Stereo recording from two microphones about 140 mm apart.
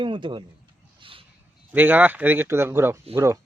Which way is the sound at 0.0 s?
35° right (ahead or behind).